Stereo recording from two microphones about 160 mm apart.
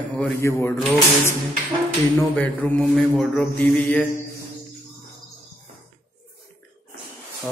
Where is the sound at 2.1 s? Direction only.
10° left (ahead or behind).